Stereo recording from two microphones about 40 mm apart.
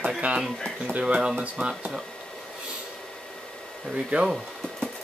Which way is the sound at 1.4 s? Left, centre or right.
Right.